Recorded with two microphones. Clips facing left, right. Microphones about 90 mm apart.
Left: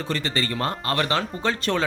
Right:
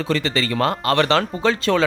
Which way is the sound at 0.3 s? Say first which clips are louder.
Right 5 dB; 90° right.